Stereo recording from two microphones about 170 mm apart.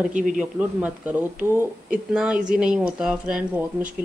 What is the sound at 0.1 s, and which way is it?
Speech, 50° right (ahead or behind).